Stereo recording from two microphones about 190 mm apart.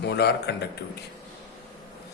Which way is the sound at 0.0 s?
60° left (ahead or behind).